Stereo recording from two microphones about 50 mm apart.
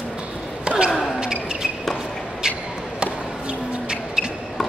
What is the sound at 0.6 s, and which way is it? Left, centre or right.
Basketball bounce, right.